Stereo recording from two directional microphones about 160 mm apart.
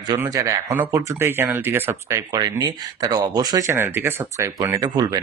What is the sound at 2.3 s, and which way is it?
Speech, 25° right (ahead or behind).